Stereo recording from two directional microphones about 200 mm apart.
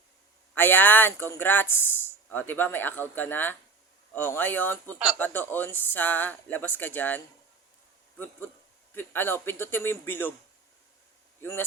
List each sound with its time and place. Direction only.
0.5 s speech: 10° left (ahead or behind)
9.0 s speech: 10° left (ahead or behind)
11.4 s speech: 10° left (ahead or behind)